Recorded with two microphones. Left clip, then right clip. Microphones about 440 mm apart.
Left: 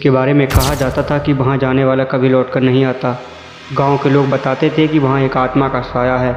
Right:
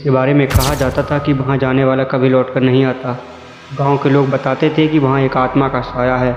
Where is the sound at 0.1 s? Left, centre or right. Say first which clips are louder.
Right 3 dB; centre.